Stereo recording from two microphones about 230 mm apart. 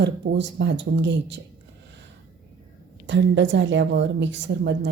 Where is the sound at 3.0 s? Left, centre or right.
Right.